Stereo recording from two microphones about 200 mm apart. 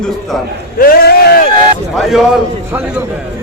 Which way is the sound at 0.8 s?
50° left (ahead or behind).